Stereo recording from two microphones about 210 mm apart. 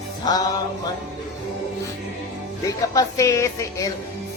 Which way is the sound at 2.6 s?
15° left (ahead or behind).